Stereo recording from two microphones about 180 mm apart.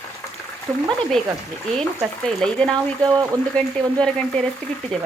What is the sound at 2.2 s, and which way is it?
Frying, 5° left (ahead or behind).